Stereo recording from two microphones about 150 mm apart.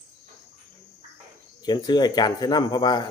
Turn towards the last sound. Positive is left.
turn(degrees=30)  # may be behind; listen again after turning